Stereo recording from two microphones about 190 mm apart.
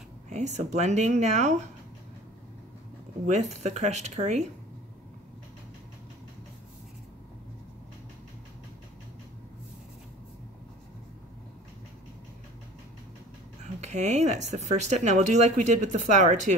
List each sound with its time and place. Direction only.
0.3 s speech: 35° right (ahead or behind)
3.3 s speech: 35° right (ahead or behind)
13.7 s speech: 35° right (ahead or behind)